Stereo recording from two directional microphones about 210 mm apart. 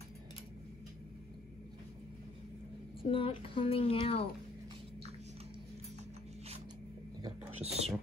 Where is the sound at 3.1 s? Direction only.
25° left (ahead or behind).